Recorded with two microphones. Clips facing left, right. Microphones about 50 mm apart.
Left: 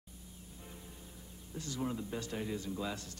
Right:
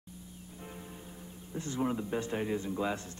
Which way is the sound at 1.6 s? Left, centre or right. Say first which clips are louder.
Right 5 dB; right.